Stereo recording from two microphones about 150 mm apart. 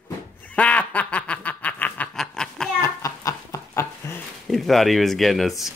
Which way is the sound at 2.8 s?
20° left (ahead or behind).